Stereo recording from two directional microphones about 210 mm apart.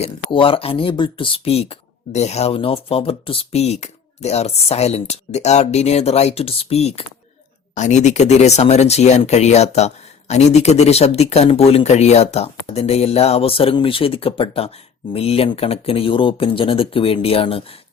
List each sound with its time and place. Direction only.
0.0 s speech: 25° left (ahead or behind)